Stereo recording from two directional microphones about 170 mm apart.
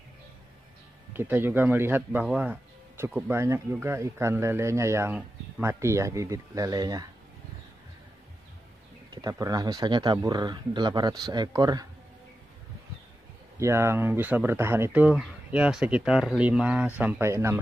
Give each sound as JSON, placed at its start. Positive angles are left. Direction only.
{"t": 1.1, "sound": "speech", "side_deg": -10}
{"t": 9.1, "sound": "speech", "side_deg": -20}
{"t": 13.6, "sound": "speech", "side_deg": -15}